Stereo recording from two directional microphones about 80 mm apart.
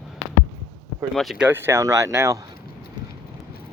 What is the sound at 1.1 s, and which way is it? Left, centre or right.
Speech, centre.